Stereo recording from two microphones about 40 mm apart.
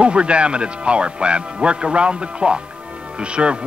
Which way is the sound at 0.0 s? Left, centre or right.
Right.